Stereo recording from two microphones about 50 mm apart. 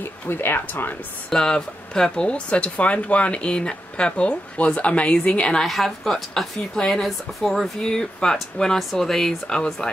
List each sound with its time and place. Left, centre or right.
0.0 s speech: left
1.3 s speech: centre
5.7 s speech: centre
7.8 s speech: centre
9.5 s speech: centre